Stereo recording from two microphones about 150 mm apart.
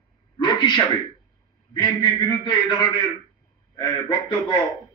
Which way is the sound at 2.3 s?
30° left (ahead or behind).